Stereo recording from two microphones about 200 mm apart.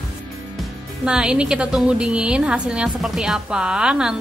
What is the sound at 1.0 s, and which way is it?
A woman's voice, 5° right (ahead or behind).